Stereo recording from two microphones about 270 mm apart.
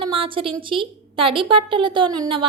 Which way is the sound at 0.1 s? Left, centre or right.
Centre.